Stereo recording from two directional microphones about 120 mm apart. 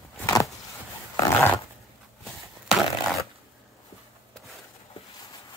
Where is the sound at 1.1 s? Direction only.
15° left (ahead or behind).